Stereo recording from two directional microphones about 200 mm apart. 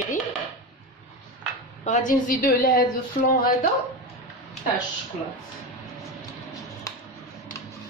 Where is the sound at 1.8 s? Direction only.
40° left (ahead or behind).